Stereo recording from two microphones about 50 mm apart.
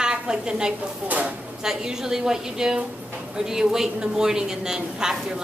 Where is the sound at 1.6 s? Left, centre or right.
Centre.